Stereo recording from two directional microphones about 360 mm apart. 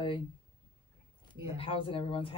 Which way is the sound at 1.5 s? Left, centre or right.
Centre.